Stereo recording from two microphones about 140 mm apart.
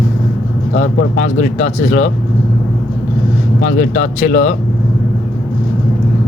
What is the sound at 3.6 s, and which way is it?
Speech, 75° left (ahead or behind).